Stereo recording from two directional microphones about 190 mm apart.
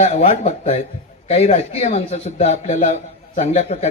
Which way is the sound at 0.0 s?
35° left (ahead or behind).